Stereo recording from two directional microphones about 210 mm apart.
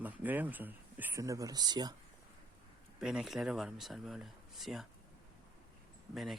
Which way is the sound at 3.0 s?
5° right (ahead or behind).